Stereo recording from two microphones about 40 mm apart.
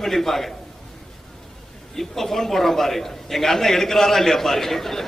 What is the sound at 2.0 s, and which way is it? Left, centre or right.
A man's voice, centre.